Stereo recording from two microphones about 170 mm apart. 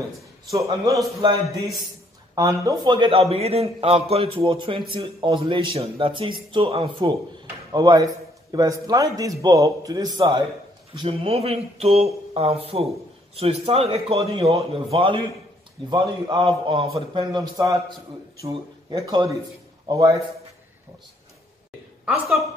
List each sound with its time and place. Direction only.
0.5 s a man's voice: 20° right (ahead or behind)
18.9 s a man's voice: 20° right (ahead or behind)
22.0 s a woman's voice: 5° right (ahead or behind)